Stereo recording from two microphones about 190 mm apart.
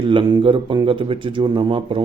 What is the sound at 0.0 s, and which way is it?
Speech, 25° right (ahead or behind).